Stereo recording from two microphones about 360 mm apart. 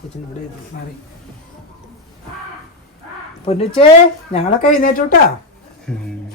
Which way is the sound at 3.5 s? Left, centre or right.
Centre.